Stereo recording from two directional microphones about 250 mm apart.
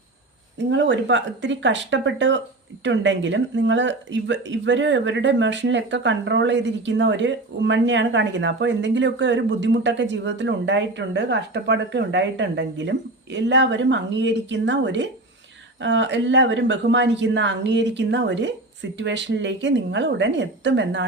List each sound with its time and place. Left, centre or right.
0.7 s speech: right